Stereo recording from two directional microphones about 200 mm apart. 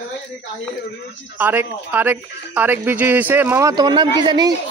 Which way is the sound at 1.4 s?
10° right (ahead or behind).